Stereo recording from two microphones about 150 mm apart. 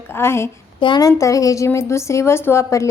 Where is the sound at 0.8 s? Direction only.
30° left (ahead or behind).